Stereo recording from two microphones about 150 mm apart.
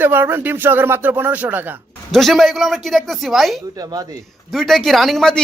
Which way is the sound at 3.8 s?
25° right (ahead or behind).